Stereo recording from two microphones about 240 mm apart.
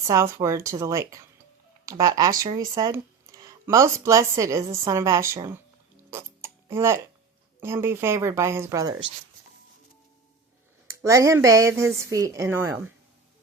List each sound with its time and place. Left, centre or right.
0.0 s speech: centre
6.1 s tick: centre
7.6 s speech: centre
10.8 s speech: centre